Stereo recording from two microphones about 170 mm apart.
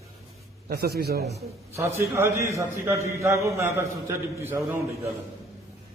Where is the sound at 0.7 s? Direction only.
65° right (ahead or behind).